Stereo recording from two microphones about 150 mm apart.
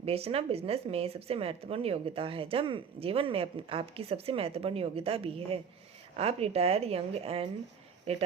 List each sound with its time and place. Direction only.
0.0 s a woman's voice: 40° right (ahead or behind)